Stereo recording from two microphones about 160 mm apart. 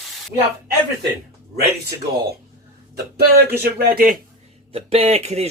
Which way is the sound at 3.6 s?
65° right (ahead or behind).